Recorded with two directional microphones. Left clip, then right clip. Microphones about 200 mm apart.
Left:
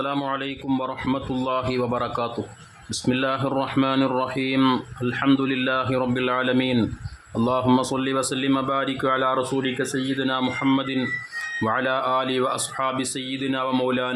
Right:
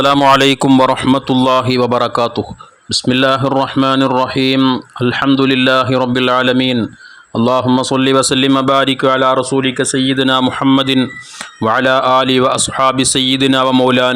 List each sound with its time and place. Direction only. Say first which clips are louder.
0.3 s speech: right 18 dB; 55° right (ahead or behind)